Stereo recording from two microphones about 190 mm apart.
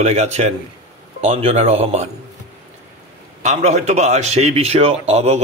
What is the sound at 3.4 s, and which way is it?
Speech, 40° right (ahead or behind).